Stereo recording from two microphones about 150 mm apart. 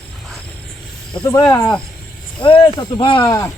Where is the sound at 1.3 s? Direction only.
20° left (ahead or behind).